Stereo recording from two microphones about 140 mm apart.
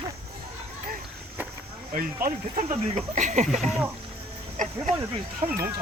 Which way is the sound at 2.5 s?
55° right (ahead or behind).